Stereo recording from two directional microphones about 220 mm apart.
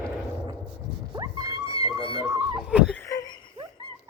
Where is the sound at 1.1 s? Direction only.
15° right (ahead or behind).